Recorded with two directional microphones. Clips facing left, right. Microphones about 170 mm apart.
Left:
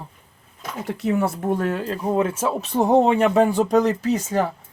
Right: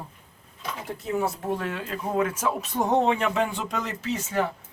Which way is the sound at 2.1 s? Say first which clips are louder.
Left 3 dB; 30° left (ahead or behind).